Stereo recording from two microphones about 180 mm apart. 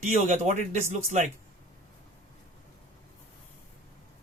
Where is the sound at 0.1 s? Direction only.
40° right (ahead or behind).